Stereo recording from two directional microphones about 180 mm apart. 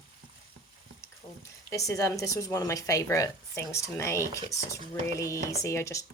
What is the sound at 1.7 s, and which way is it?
Speech, 15° left (ahead or behind).